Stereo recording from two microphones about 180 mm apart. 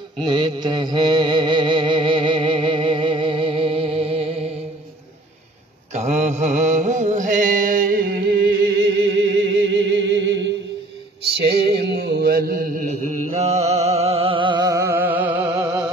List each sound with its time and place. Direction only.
0.2 s music: 25° right (ahead or behind)
5.9 s mantra: 40° right (ahead or behind); by 10.5 s 75° right (ahead or behind)
11.3 s mantra: 65° right (ahead or behind); by 15.8 s 15° right (ahead or behind)